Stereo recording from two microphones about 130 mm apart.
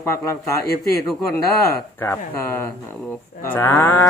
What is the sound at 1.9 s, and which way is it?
Speech, 20° left (ahead or behind).